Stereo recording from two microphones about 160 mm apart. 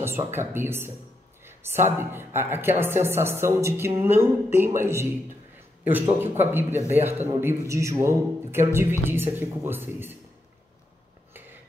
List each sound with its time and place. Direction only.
0.0 s a woman's voice: 15° right (ahead or behind)